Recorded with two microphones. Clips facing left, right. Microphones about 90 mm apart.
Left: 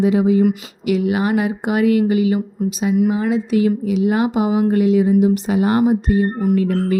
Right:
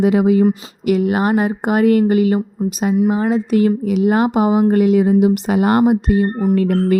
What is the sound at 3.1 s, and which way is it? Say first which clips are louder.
Speech: right 2 dB; 40° right (ahead or behind).